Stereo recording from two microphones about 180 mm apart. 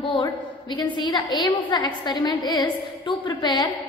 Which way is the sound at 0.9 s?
25° left (ahead or behind).